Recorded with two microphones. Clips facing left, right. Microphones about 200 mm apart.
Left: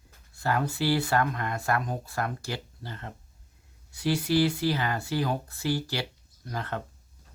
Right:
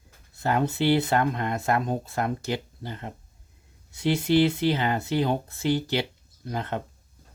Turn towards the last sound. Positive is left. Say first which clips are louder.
# right 4 dB
turn(degrees=-20)  # may be behind; listen again after turning